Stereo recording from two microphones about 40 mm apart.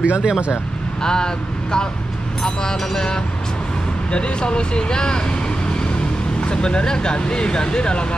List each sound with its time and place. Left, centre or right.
0.0 s speech: right
1.0 s speech: centre
6.4 s speech: left